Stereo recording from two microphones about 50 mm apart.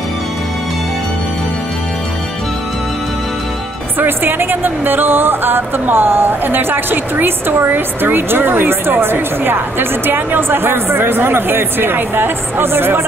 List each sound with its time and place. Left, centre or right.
4.0 s speech: right